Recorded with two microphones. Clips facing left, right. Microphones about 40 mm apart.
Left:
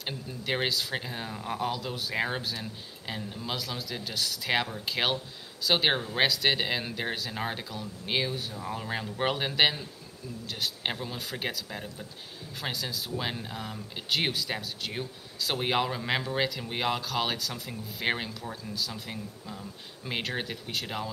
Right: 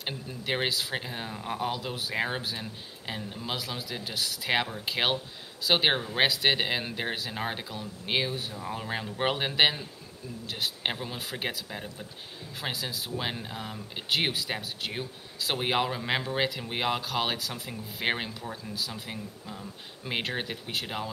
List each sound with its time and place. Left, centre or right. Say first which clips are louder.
0.0 s speech: even; centre